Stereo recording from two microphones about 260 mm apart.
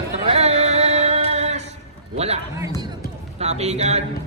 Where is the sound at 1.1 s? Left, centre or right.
Right.